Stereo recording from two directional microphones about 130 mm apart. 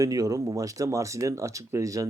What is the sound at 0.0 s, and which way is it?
Speech, 25° right (ahead or behind).